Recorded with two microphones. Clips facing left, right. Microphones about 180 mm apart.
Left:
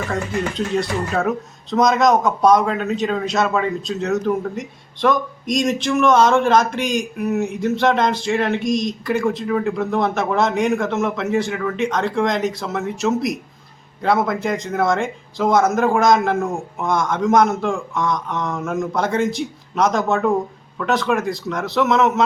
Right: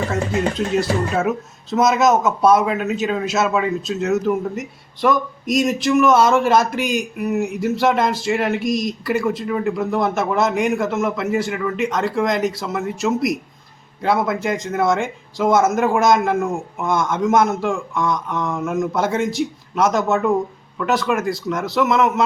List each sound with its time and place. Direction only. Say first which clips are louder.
0.3 s speech: right 3 dB; 40° right (ahead or behind)
1.7 s speech: even; 5° right (ahead or behind)